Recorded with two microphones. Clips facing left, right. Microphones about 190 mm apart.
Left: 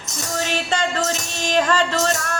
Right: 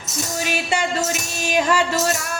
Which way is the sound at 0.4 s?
10° right (ahead or behind).